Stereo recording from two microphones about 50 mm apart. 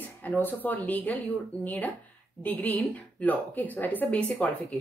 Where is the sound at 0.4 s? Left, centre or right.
Left.